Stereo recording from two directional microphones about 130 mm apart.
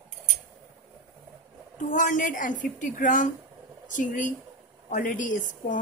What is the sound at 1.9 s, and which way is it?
A woman's voice, 75° left (ahead or behind).